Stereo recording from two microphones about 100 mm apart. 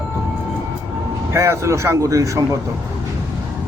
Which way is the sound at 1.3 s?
30° right (ahead or behind).